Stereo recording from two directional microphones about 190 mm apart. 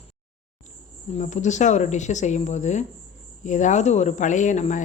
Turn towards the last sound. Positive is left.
turn(degrees=40)  # may be behind; listen again after turning